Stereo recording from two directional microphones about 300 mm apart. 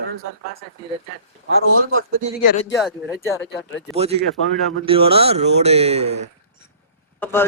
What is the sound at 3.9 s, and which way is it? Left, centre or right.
Speech, right.